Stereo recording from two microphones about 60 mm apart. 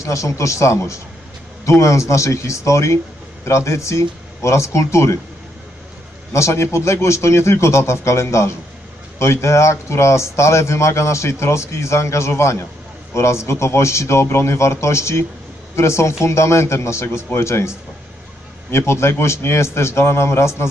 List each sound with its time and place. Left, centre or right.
0.0 s speech: left
6.3 s speech: left